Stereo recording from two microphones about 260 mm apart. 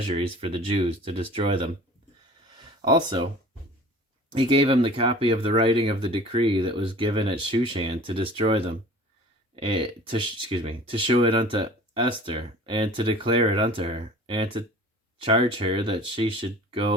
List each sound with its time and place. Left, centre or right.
0.1 s speech: right
4.4 s speech: centre